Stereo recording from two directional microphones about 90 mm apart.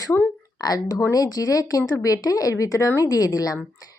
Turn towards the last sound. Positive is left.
turn(degrees=45)  # may be behind; listen again after turning